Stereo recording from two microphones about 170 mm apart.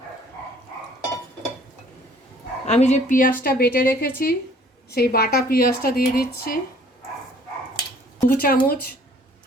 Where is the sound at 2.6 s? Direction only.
40° left (ahead or behind); by 6.6 s 60° left (ahead or behind).